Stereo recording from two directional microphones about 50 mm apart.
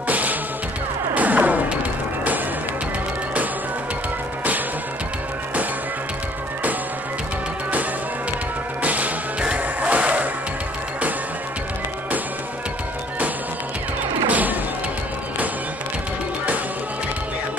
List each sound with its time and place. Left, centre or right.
0.1 s music: right
8.8 s music: right
14.2 s music: right